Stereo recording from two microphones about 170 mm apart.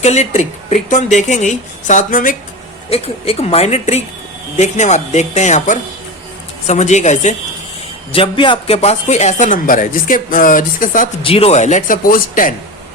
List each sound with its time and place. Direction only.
0.0 s a man's voice: 40° left (ahead or behind)
2.9 s a man's voice: 40° left (ahead or behind)
8.1 s a man's voice: 30° left (ahead or behind); by 11.1 s 50° left (ahead or behind)
11.2 s a man's voice: 35° left (ahead or behind); by 12.5 s 55° left (ahead or behind)